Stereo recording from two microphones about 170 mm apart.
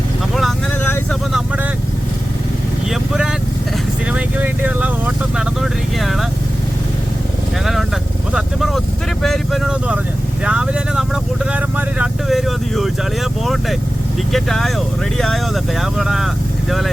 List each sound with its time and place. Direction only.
2.9 s vehicle: 5° right (ahead or behind)
6.0 s speech: centre (ahead or behind)
7.6 s vehicle: centre (ahead or behind)
8.3 s speech: centre (ahead or behind)